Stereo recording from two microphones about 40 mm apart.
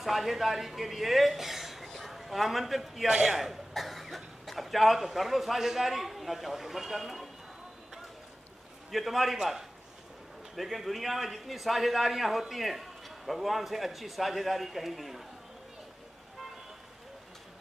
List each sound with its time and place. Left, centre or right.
0.0 s speech: centre
3.1 s a man's voice: centre
3.3 s speech: centre
8.9 s a man's voice: centre